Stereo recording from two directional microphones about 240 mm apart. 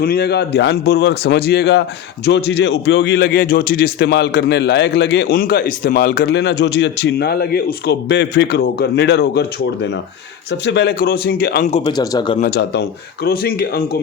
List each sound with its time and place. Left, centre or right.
0.0 s a man's voice: left
10.7 s a man's voice: left
11.7 s speech: centre
12.4 s a man's voice: left